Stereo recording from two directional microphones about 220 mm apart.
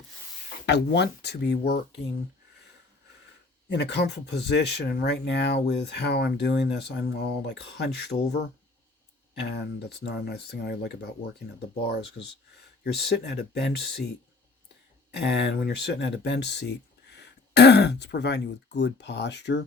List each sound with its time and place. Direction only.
0.6 s speech: 50° left (ahead or behind)
3.7 s speech: 50° left (ahead or behind)
15.1 s speech: 50° left (ahead or behind)